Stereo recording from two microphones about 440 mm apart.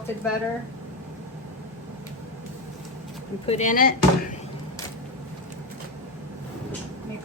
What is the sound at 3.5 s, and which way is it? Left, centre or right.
Speech, centre.